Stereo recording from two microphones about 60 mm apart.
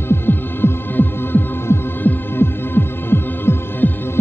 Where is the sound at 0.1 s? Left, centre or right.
Left.